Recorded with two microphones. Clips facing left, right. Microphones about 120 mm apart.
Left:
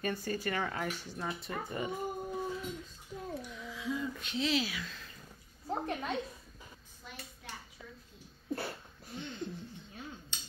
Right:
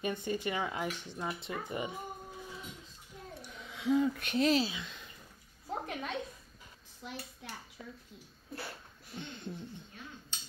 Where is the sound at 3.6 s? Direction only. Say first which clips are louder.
Right 10 dB; 65° right (ahead or behind).